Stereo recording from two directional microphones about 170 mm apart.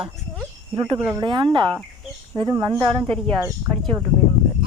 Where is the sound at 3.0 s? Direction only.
5° left (ahead or behind).